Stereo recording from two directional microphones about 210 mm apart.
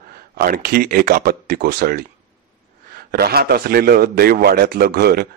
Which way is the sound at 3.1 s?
45° right (ahead or behind).